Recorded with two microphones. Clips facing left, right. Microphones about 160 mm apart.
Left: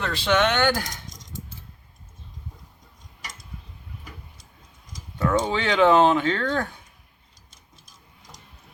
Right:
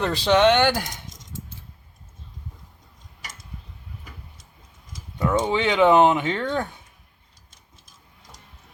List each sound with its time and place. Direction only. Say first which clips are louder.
0.0 s speech: right 4 dB; 30° right (ahead or behind)
4.9 s speech: even; 20° right (ahead or behind)